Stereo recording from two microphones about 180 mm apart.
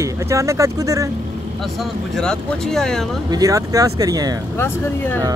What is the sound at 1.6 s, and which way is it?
Speech, centre (ahead or behind).